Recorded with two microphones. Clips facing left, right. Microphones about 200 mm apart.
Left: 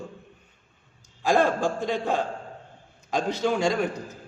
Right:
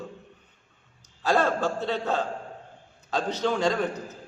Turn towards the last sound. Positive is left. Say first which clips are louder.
# left 1 dB
turn(degrees=10)  # may be behind; listen again after turning